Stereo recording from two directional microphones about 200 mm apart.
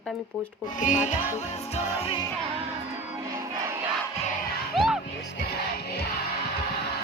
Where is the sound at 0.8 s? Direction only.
40° left (ahead or behind).